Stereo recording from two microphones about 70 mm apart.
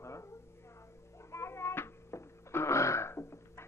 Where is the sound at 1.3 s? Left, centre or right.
Left.